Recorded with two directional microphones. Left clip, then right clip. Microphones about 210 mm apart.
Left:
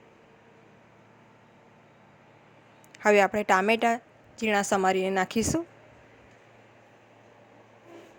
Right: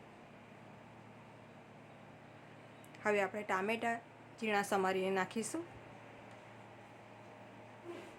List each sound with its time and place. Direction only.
3.0 s a woman's voice: 40° left (ahead or behind)